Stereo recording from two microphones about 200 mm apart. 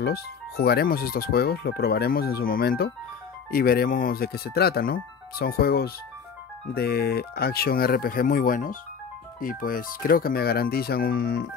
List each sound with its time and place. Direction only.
0.0 s speech: 50° left (ahead or behind)